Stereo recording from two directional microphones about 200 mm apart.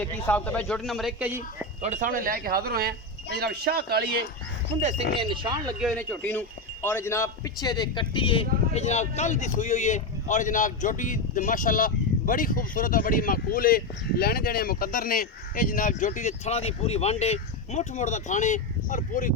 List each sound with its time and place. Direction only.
0.0 s a man's voice: 10° left (ahead or behind)
1.8 s speech: 40° right (ahead or behind)
4.8 s speech: 35° right (ahead or behind)
5.3 s speech: 20° right (ahead or behind)
5.8 s a man's voice: 5° left (ahead or behind); by 19.3 s 40° left (ahead or behind)